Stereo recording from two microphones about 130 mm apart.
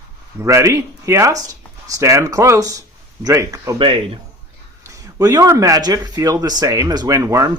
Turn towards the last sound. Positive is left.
turn(degrees=-25)  # may be behind; listen again after turning